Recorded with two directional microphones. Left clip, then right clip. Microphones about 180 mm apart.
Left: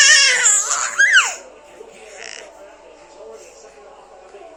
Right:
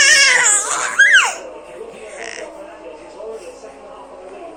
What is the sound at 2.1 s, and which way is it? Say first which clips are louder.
Music: right 4 dB; 10° left (ahead or behind).